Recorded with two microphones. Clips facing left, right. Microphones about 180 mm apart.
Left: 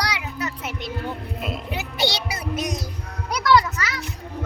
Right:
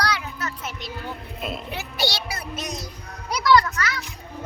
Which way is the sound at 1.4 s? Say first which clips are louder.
Right 1 dB; 10° left (ahead or behind).